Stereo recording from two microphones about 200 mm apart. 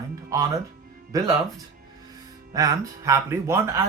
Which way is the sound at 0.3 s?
15° right (ahead or behind).